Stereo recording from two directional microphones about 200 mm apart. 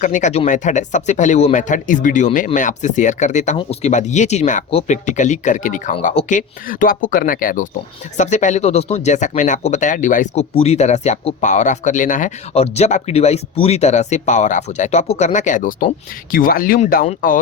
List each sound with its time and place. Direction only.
0.0 s speech: 40° left (ahead or behind)